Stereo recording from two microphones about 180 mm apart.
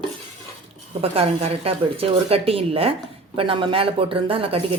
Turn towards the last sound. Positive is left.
turn(degrees=-30)  # may be behind; listen again after turning